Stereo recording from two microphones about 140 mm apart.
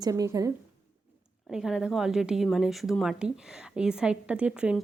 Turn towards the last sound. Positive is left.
turn(degrees=-5)  # may be behind; listen again after turning